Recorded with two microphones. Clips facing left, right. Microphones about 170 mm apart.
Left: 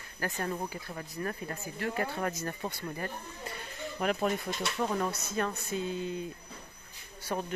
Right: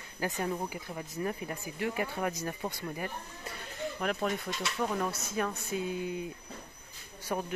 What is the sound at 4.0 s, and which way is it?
Speech, 5° left (ahead or behind).